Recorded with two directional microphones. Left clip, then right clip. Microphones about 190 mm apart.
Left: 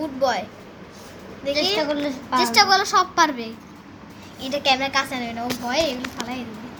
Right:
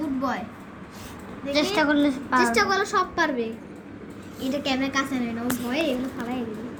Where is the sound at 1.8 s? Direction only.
Centre (ahead or behind).